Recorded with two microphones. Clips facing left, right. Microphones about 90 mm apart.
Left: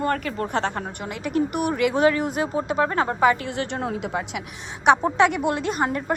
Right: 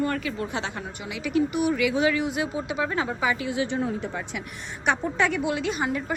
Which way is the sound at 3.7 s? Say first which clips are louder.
Left 1 dB; 80° left.